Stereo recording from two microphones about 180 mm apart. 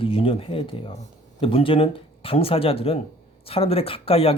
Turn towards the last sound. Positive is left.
turn(degrees=30)  # may be behind; listen again after turning